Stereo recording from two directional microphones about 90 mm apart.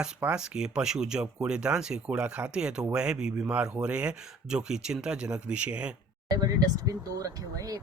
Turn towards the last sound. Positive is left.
turn(degrees=-40)  # may be behind; listen again after turning